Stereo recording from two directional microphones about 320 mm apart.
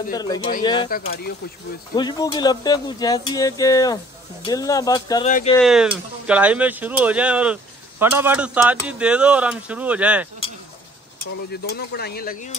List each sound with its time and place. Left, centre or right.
0.1 s speech: centre
1.0 s speech: left
2.0 s speech: centre
5.6 s speech: centre
11.6 s speech: left